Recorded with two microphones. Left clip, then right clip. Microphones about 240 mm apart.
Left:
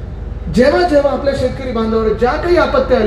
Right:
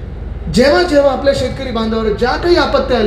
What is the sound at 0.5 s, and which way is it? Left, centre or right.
Speech, right.